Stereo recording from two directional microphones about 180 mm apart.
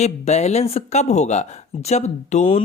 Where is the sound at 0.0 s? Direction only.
40° left (ahead or behind).